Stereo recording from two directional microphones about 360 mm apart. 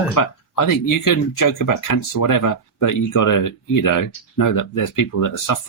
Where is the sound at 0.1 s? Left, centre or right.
Left.